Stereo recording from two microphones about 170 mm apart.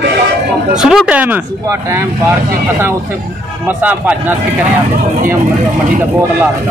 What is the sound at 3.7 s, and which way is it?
Speech, 10° right (ahead or behind).